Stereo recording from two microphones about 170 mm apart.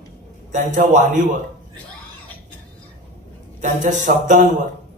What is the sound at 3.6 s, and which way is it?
A man's voice, 45° right (ahead or behind).